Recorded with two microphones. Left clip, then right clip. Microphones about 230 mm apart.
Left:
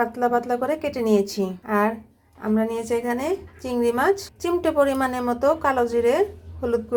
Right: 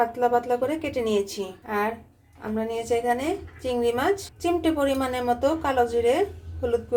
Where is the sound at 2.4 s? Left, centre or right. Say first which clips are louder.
Left 4 dB; left.